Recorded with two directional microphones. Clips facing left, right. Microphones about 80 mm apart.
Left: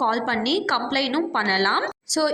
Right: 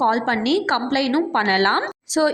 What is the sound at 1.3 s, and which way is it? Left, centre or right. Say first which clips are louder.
Speech: right 3 dB; right.